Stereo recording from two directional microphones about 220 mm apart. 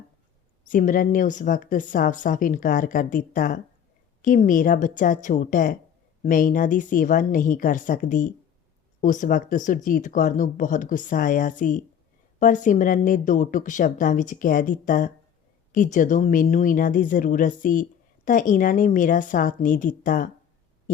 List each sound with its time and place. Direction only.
0.7 s a woman's voice: 40° left (ahead or behind)